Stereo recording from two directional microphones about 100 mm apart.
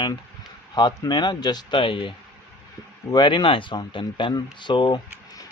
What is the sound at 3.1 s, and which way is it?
Speech, 50° left (ahead or behind).